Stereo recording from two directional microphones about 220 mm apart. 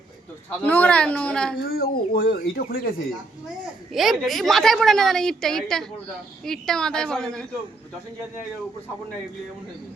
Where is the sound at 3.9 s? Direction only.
Centre (ahead or behind).